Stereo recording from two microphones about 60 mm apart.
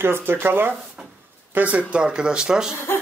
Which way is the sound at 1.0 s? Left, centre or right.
Centre.